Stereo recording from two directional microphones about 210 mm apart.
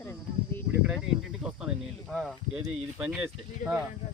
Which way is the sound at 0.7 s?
5° right (ahead or behind).